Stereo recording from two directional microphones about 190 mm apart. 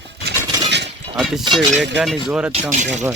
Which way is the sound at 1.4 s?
25° right (ahead or behind).